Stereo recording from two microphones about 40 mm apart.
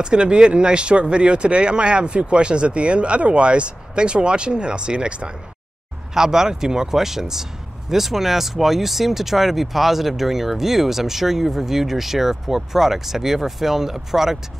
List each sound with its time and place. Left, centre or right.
0.0 s speech: right
6.1 s speech: centre